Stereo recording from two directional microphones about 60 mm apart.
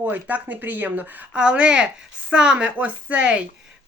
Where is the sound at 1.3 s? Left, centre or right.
Centre.